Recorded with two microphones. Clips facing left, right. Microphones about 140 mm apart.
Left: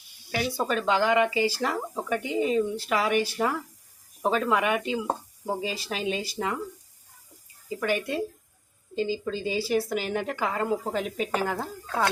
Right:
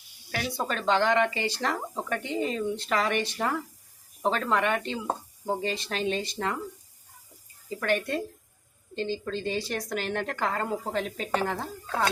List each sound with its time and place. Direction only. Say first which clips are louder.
0.3 s speech: left 3 dB; 5° left (ahead or behind)
7.8 s speech: even; 5° left (ahead or behind)